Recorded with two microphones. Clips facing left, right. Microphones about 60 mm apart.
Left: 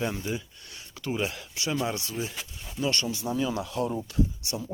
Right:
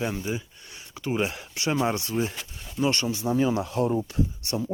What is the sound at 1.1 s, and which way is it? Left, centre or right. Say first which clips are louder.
Speech: right 3 dB; right.